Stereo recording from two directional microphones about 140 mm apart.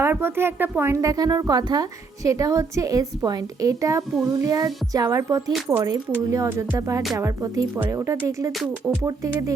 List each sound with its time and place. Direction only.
0.0 s speech: 15° right (ahead or behind)
5.5 s speech: centre (ahead or behind)
5.7 s speech: 25° right (ahead or behind)